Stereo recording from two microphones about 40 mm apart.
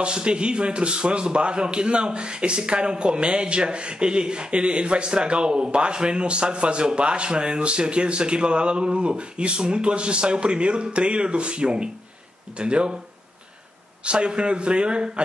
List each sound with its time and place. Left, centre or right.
0.0 s a man's voice: right
14.0 s a man's voice: right